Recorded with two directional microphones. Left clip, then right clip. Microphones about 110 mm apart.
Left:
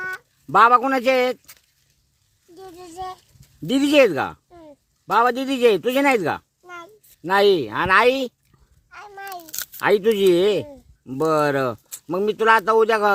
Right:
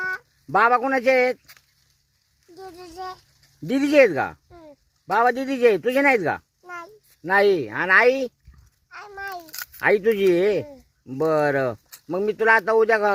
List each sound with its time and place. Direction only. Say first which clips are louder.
0.0 s speech: right 2 dB; 10° left (ahead or behind)
2.6 s a child's voice: left 2 dB; 10° left (ahead or behind)
8.9 s speech: right 1 dB; 5° left (ahead or behind)